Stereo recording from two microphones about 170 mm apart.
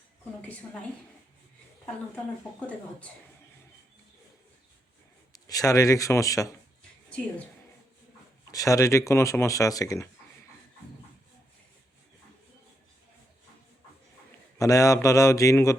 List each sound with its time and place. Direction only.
0.4 s speech: 5° left (ahead or behind)
2.1 s speech: 5° left (ahead or behind)
5.5 s speech: 20° left (ahead or behind)
8.4 s speech: 20° left (ahead or behind)
14.6 s speech: 20° left (ahead or behind)